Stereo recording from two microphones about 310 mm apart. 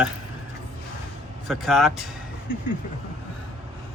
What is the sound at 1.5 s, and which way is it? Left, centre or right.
Speech, centre.